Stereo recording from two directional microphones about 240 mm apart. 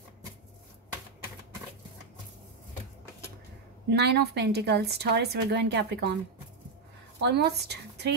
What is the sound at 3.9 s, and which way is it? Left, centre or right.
A woman's voice, right.